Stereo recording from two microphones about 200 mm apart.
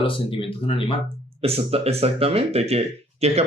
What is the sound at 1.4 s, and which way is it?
Speech, 30° right (ahead or behind).